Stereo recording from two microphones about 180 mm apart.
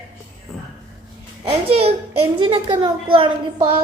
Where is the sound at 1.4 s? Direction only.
35° right (ahead or behind).